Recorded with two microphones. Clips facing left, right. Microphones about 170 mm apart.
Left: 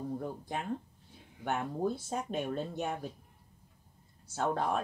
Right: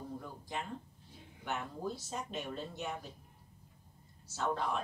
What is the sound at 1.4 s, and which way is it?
Speech, 55° left (ahead or behind).